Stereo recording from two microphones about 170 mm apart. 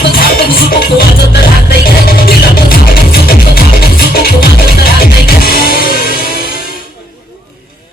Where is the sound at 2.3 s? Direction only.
60° left (ahead or behind).